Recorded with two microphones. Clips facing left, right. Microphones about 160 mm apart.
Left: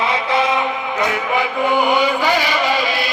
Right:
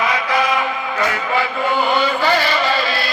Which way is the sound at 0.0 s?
25° left (ahead or behind).